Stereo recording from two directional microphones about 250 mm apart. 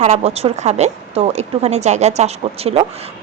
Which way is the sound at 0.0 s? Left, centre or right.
Right.